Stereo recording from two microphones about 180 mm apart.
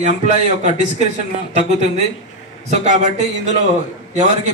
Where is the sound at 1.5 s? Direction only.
40° right (ahead or behind).